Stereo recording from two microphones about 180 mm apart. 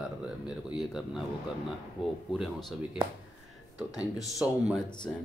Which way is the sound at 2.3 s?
5° right (ahead or behind).